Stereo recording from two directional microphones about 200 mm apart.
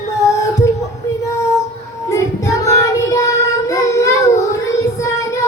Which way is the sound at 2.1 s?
15° left (ahead or behind).